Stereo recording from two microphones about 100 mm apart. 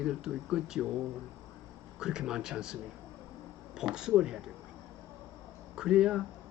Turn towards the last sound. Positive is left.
turn(degrees=-10)  # may be behind; listen again after turning